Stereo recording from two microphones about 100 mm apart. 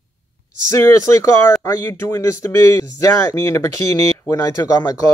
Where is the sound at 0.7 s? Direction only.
30° left (ahead or behind).